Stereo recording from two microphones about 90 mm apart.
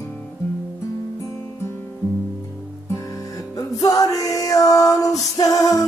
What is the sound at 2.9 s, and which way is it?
Music, 40° left (ahead or behind).